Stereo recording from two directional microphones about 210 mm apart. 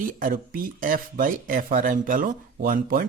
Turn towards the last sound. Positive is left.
turn(degrees=-45)  # may be behind; listen again after turning